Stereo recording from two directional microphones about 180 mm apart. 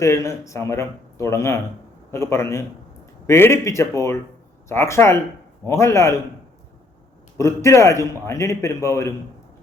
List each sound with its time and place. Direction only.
0.0 s a man's voice: 15° left (ahead or behind)
7.3 s a man's voice: 15° left (ahead or behind)